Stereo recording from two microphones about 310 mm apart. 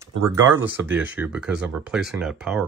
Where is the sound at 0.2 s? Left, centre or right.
Centre.